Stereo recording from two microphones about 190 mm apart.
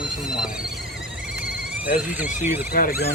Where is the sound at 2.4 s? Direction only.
10° right (ahead or behind).